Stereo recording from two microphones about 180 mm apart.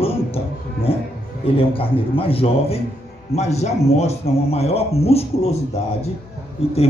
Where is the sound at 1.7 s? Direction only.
30° left (ahead or behind).